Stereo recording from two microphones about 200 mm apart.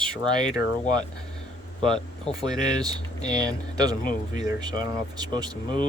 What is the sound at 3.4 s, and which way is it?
Speech, 20° right (ahead or behind).